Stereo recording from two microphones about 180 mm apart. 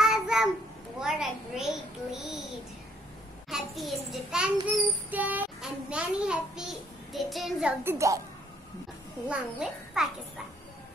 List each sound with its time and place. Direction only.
0.0 s child singing: centre (ahead or behind)
3.4 s a child's voice: centre (ahead or behind)
7.8 s a woman's voice: 15° right (ahead or behind)
9.3 s a child's voice: 5° right (ahead or behind)